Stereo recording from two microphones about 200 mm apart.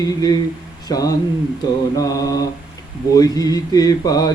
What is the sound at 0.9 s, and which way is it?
Speech, 20° left (ahead or behind).